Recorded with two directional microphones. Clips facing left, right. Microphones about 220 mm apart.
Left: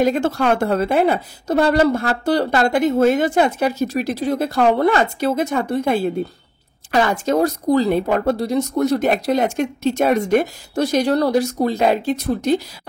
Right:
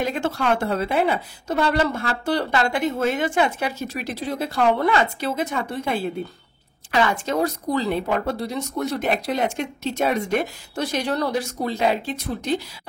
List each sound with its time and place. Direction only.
0.0 s a woman's voice: 40° left (ahead or behind)